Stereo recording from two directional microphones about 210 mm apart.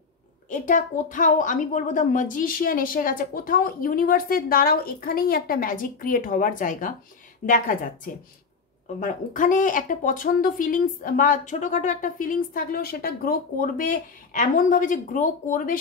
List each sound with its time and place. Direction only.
0.5 s speech: 40° left (ahead or behind)